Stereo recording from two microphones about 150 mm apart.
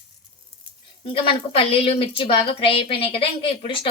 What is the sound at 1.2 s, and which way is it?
A woman's voice, 40° left (ahead or behind).